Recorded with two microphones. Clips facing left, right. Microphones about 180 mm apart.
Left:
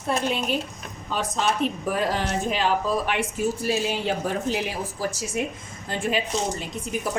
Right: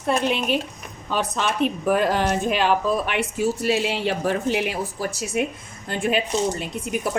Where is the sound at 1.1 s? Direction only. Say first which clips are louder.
Right 1 dB; 70° right (ahead or behind).